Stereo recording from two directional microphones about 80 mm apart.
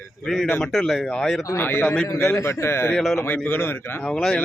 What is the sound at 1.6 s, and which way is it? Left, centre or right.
Speech, left.